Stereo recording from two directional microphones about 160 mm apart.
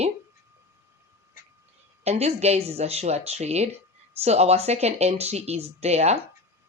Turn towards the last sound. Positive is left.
turn(degrees=-40)  # may be behind; listen again after turning